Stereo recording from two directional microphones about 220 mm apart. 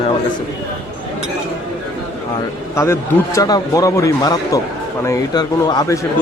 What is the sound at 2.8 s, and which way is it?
A man's voice, 15° left (ahead or behind).